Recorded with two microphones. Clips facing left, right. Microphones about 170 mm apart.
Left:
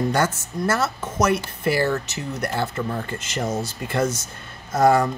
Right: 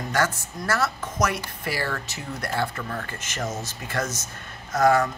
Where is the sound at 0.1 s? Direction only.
25° left (ahead or behind).